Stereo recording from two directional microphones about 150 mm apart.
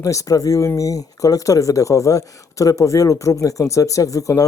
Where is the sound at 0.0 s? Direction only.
20° left (ahead or behind).